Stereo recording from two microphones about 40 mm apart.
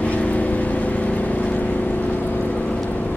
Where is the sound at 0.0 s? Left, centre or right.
Left.